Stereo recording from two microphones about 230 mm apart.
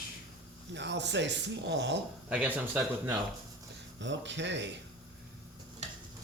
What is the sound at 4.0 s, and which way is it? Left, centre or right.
Speech, right.